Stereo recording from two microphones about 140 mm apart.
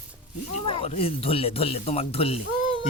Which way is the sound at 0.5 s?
45° left (ahead or behind).